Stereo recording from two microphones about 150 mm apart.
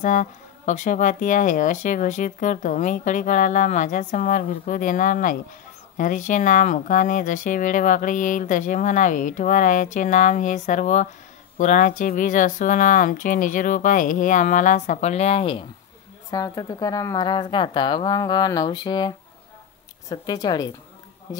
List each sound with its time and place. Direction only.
0.0 s speech: 60° left (ahead or behind); by 15.6 s 40° left (ahead or behind)
16.3 s speech: 25° left (ahead or behind)